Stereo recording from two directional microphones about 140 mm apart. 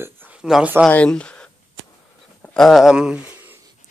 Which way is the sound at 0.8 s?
5° left (ahead or behind).